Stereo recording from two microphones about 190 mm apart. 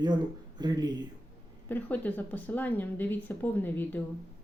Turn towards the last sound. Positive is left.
turn(degrees=10)  # may be behind; listen again after turning